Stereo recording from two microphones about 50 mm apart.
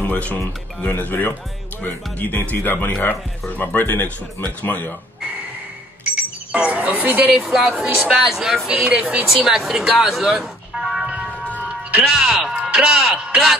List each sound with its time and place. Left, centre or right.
0.0 s speech: left
6.1 s speech: right
7.3 s a woman's voice: centre
9.3 s speech: centre